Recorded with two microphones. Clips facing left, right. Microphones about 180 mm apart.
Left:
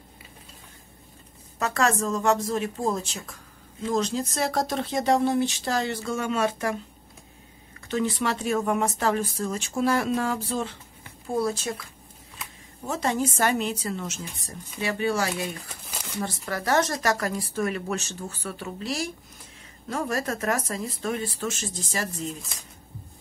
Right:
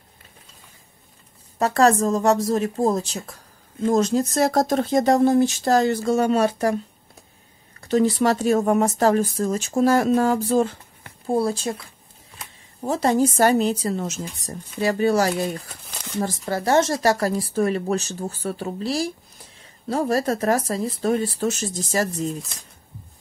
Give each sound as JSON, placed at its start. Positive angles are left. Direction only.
{"t": 1.6, "sound": "speech", "side_deg": -35}
{"t": 7.8, "sound": "speech", "side_deg": -40}
{"t": 11.3, "sound": "speech", "side_deg": -30}
{"t": 12.8, "sound": "speech", "side_deg": -35}
{"t": 15.8, "sound": "a sound", "side_deg": 0}
{"t": 16.2, "sound": "speech", "side_deg": -30}